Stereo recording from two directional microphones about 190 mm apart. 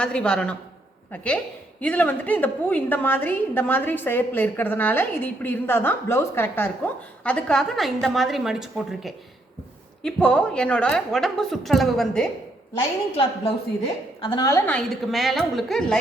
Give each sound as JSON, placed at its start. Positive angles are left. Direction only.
{"t": 0.0, "sound": "a woman's voice", "side_deg": 5}
{"t": 14.2, "sound": "a woman's voice", "side_deg": 25}
{"t": 14.7, "sound": "a woman's voice", "side_deg": 5}